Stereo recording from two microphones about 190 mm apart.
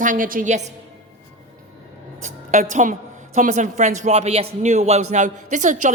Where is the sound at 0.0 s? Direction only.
45° right (ahead or behind).